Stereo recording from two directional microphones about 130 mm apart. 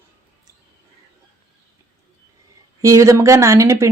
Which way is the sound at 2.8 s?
25° right (ahead or behind).